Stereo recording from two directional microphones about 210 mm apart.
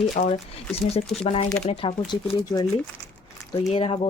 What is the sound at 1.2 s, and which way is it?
Speech, 25° left (ahead or behind).